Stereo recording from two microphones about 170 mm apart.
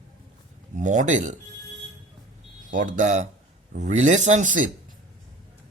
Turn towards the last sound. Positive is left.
turn(degrees=-50)  # may be behind; listen again after turning